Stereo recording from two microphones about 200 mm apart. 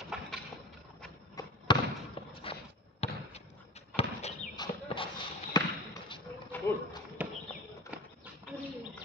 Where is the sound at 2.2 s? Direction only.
25° left (ahead or behind).